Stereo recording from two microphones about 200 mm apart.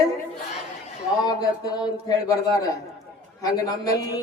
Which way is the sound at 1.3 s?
20° left (ahead or behind).